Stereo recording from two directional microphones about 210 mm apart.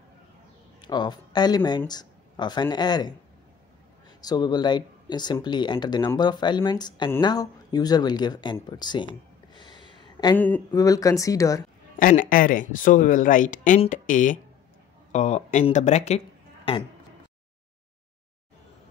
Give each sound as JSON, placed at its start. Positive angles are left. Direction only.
{"t": 0.7, "sound": "speech", "side_deg": 20}
{"t": 4.2, "sound": "speech", "side_deg": 20}
{"t": 10.3, "sound": "speech", "side_deg": 10}
{"t": 12.0, "sound": "speech", "side_deg": 40}